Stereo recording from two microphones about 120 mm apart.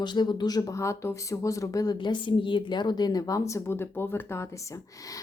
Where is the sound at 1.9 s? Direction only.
40° left (ahead or behind); by 4.4 s 20° left (ahead or behind).